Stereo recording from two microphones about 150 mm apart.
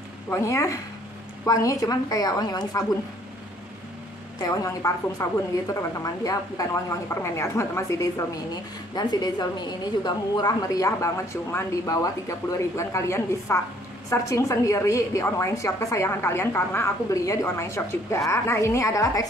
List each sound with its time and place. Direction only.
0.3 s a woman's voice: 20° left (ahead or behind)
4.4 s a woman's voice: 20° left (ahead or behind)